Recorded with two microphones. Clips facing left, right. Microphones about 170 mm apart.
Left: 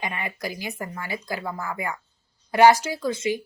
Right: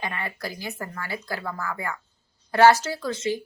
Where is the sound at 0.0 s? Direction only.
15° left (ahead or behind).